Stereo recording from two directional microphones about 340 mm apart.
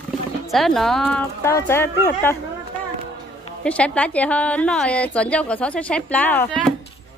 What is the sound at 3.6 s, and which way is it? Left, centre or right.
A woman's voice, centre.